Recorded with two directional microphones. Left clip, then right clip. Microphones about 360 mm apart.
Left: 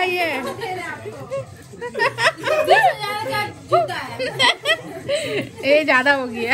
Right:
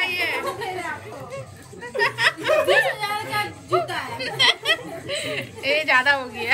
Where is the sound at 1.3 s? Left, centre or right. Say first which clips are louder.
Left 7 dB; centre.